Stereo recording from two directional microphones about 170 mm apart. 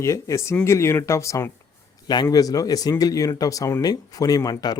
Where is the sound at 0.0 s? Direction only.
15° left (ahead or behind).